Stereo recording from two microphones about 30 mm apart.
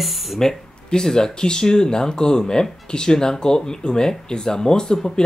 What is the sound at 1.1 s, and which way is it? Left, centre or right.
Speech, left.